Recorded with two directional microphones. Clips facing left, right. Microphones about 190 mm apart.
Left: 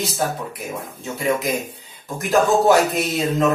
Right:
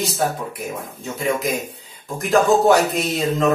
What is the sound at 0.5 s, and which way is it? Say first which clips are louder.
Speech: right 1 dB; centre (ahead or behind).